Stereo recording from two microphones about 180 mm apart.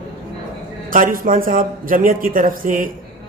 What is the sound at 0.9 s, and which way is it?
A man's voice, 50° right (ahead or behind).